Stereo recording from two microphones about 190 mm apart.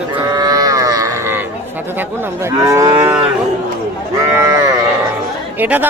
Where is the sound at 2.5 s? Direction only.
15° right (ahead or behind).